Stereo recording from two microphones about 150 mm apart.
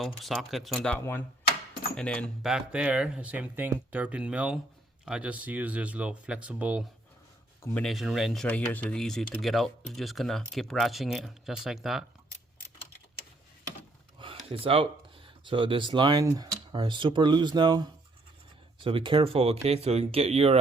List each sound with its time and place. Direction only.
0.0 s speech: centre (ahead or behind)
2.5 s speech: 5° right (ahead or behind)
7.6 s speech: 5° left (ahead or behind)
14.2 s a sound: 35° right (ahead or behind)
15.4 s speech: 35° right (ahead or behind)